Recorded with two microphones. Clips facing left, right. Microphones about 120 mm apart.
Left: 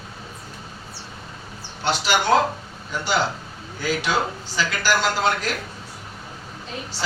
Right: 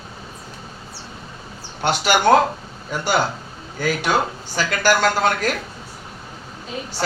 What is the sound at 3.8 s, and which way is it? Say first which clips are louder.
A man's voice: right 3 dB; 50° right (ahead or behind).